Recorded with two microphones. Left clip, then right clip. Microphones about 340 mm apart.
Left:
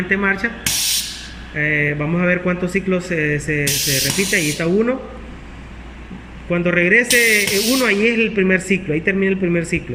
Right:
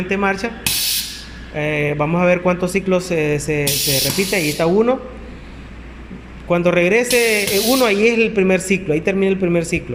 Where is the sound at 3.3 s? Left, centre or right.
Right.